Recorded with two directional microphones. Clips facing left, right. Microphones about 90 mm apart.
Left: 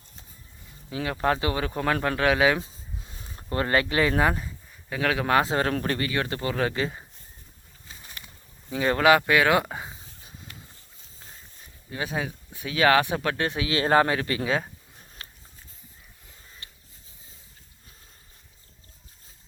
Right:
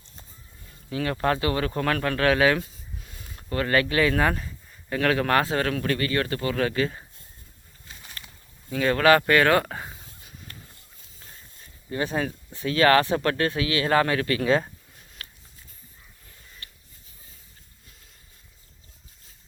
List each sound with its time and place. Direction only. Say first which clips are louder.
0.9 s speech: right 1 dB; 15° left (ahead or behind)
4.3 s speech: even; 10° left (ahead or behind)
5.5 s speech: even; 25° left (ahead or behind)
8.7 s speech: right 1 dB; 20° left (ahead or behind)
11.9 s speech: right 4 dB; 5° left (ahead or behind)
13.4 s speech: right 1 dB; 20° left (ahead or behind)
14.4 s speech: right 7 dB; 5° left (ahead or behind)
14.9 s a sound: even; 30° left (ahead or behind)
16.6 s a sound: right 2 dB; 20° left (ahead or behind)